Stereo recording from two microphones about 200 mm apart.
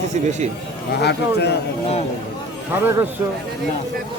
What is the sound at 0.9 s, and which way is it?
Speech, 55° left (ahead or behind).